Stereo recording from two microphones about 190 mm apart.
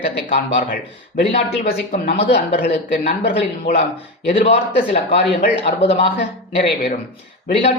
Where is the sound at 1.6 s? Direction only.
50° left (ahead or behind).